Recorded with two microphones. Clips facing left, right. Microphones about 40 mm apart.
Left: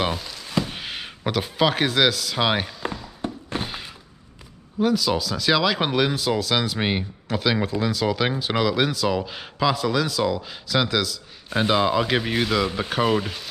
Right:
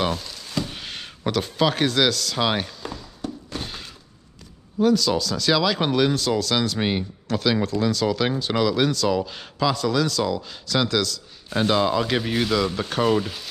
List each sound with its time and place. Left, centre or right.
0.0 s speech: centre
3.2 s a sound: left
3.6 s thunk: centre
4.7 s speech: centre